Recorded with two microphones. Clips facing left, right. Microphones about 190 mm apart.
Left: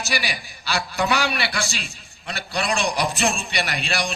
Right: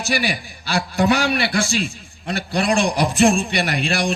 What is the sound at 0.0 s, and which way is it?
A man's voice, 50° right (ahead or behind).